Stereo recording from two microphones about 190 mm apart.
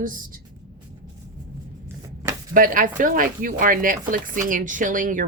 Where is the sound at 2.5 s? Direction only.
45° right (ahead or behind).